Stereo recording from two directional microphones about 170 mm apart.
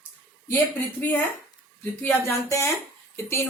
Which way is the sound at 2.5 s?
15° left (ahead or behind).